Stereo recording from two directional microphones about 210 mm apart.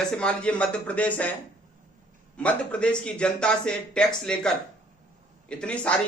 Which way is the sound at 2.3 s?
5° left (ahead or behind).